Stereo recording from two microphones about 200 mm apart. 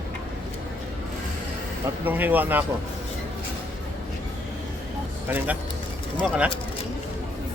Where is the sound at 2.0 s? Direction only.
10° right (ahead or behind).